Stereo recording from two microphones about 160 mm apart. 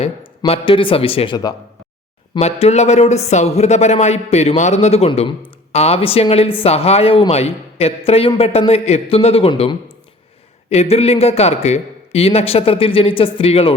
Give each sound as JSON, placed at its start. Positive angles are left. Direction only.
{"t": 0.0, "sound": "speech", "side_deg": 40}
{"t": 2.4, "sound": "speech", "side_deg": 40}